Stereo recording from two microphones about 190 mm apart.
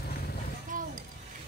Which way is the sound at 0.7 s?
45° right (ahead or behind).